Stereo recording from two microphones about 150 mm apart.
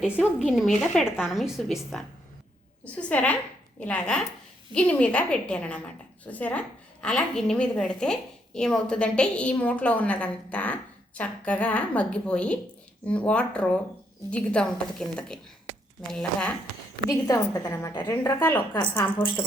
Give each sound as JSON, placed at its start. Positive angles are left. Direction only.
{"t": 0.0, "sound": "a woman's voice", "side_deg": -5}
{"t": 17.1, "sound": "a woman's voice", "side_deg": 25}